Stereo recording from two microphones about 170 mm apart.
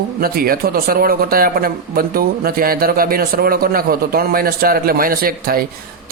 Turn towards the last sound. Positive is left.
turn(degrees=-60)  # may be behind; listen again after turning